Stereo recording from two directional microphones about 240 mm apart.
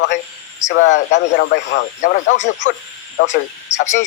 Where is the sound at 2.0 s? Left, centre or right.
Left.